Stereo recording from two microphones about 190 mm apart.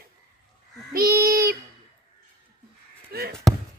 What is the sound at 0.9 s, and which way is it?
Child singing, 50° right (ahead or behind).